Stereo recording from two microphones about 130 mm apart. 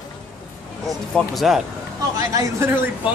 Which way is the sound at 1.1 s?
Centre (ahead or behind).